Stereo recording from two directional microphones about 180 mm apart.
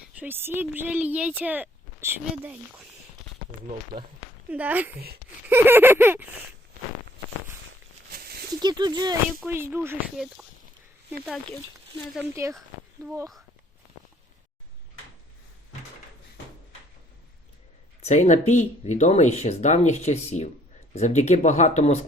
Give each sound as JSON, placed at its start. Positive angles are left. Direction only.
{"t": 0.2, "sound": "speech", "side_deg": -10}
{"t": 4.5, "sound": "speech", "side_deg": -10}
{"t": 4.9, "sound": "speech", "side_deg": -60}
{"t": 5.5, "sound": "speech", "side_deg": -10}
{"t": 8.1, "sound": "a sound", "side_deg": -60}
{"t": 8.6, "sound": "speech", "side_deg": -25}
{"t": 9.4, "sound": "speech", "side_deg": -10}
{"t": 12.3, "sound": "speech", "side_deg": -15}
{"t": 18.0, "sound": "speech", "side_deg": 40}